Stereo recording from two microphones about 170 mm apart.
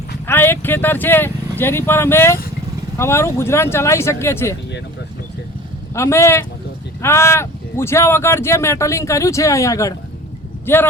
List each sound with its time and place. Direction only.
0.3 s speech: 15° left (ahead or behind)
5.9 s speech: 15° left (ahead or behind)